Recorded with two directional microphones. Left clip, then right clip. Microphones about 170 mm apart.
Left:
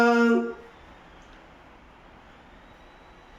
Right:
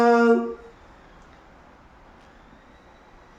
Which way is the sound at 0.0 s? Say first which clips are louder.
Right 3 dB; 10° right (ahead or behind).